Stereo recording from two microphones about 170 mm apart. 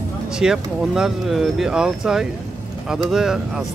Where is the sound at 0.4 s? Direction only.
5° right (ahead or behind).